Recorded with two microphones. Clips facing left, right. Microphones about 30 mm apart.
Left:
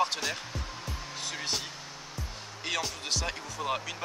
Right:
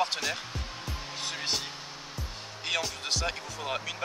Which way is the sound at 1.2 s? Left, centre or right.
Centre.